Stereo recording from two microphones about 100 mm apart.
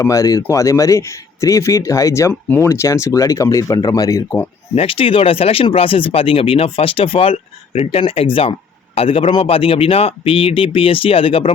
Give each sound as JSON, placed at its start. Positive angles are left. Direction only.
{"t": 0.0, "sound": "speech", "side_deg": 35}
{"t": 4.7, "sound": "speech", "side_deg": 75}